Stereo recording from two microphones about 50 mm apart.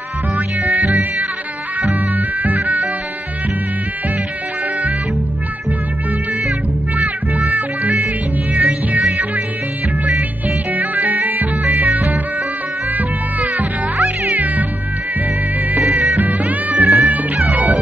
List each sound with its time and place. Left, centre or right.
0.6 s music: right
7.0 s music: right
10.7 s music: right
12.9 s cat: right
15.9 s music: right